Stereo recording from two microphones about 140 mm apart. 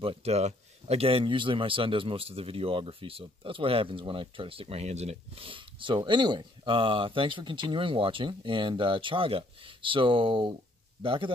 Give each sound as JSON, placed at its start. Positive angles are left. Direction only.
{"t": 0.0, "sound": "a man's voice", "side_deg": -45}